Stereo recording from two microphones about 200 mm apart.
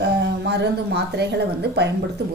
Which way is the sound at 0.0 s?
60° right (ahead or behind).